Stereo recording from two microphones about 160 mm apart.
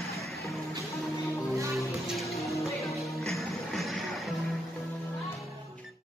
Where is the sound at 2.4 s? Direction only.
20° left (ahead or behind).